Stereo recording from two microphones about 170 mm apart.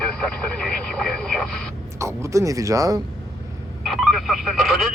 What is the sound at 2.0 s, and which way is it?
Speech, 15° right (ahead or behind).